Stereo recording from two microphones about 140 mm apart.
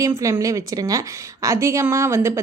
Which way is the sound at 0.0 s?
25° right (ahead or behind).